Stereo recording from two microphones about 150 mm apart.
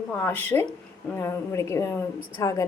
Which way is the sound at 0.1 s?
15° left (ahead or behind).